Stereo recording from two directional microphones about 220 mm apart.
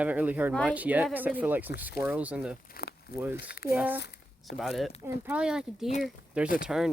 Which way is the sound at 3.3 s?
45° left (ahead or behind).